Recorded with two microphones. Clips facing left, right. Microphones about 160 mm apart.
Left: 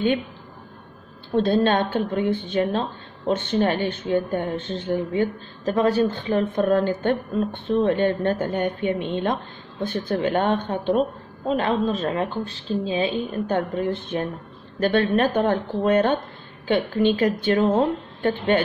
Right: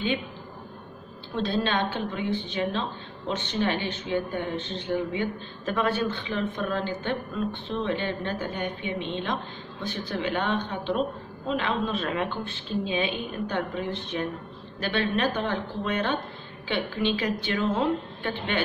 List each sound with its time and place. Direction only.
1.3 s a woman's voice: 50° left (ahead or behind)